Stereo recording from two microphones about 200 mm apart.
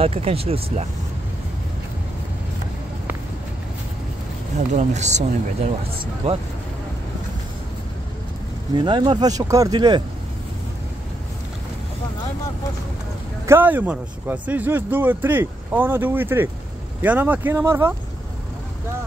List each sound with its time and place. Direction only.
0.0 s speech: 30° right (ahead or behind)
4.6 s speech: 35° right (ahead or behind)
6.2 s speech: 30° right (ahead or behind)
8.7 s speech: 25° right (ahead or behind)
13.5 s a man's voice: 10° right (ahead or behind)